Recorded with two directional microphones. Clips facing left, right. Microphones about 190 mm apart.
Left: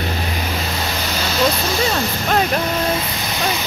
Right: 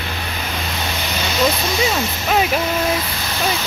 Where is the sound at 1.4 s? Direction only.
Centre (ahead or behind).